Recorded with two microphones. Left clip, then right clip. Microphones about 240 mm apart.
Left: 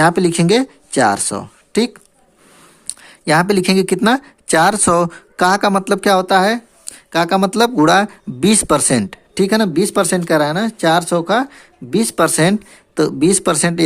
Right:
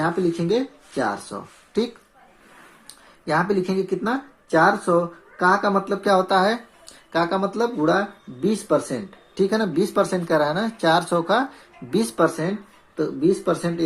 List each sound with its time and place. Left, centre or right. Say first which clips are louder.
0.0 s speech: left 9 dB; left
12.9 s speech: left 7 dB; left